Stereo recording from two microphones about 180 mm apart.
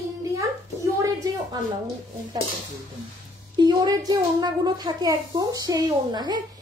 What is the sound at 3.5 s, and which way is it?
A child's voice, 20° right (ahead or behind).